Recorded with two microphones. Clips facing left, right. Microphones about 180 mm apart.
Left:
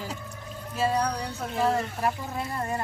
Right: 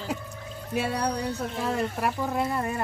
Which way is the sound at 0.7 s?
65° right (ahead or behind).